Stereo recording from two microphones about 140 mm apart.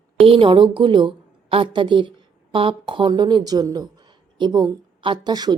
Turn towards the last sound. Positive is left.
turn(degrees=-30)  # may be behind; listen again after turning